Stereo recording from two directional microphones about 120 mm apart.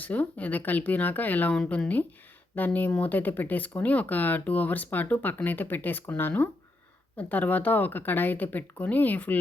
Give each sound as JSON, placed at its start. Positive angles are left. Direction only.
{"t": 0.0, "sound": "speech", "side_deg": 15}